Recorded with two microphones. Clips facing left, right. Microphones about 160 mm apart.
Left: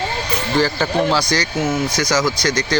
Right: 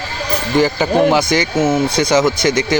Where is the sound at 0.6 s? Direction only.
15° right (ahead or behind).